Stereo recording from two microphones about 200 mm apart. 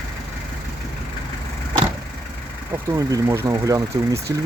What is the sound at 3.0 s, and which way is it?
Speech, 15° right (ahead or behind).